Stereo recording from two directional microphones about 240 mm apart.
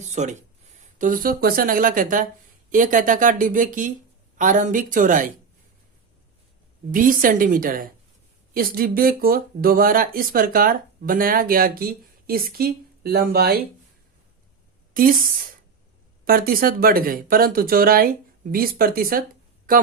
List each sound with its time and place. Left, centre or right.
0.1 s speech: right
6.9 s speech: right
15.0 s speech: right
16.2 s speech: right